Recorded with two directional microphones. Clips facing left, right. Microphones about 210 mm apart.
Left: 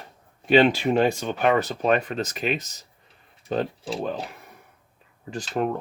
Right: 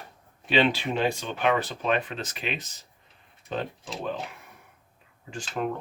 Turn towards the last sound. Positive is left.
turn(degrees=40)  # may be behind; listen again after turning